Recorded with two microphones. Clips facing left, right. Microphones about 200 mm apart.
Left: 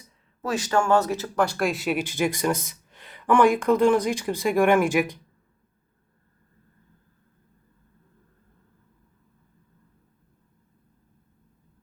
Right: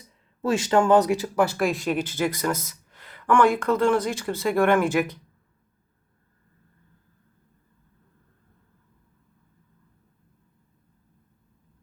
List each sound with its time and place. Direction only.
0.4 s speech: 25° right (ahead or behind); by 5.2 s 15° left (ahead or behind)